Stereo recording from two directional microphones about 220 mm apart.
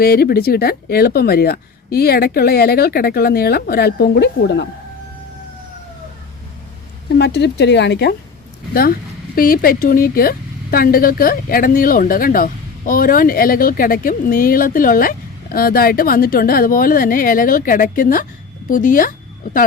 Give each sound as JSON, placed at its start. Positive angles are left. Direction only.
{"t": 0.0, "sound": "speech", "side_deg": 45}
{"t": 7.2, "sound": "speech", "side_deg": 50}